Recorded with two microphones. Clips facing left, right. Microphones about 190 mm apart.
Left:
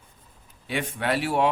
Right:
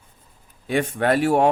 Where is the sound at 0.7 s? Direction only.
45° right (ahead or behind).